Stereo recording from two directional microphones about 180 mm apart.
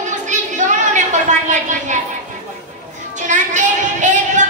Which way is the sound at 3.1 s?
45° right (ahead or behind).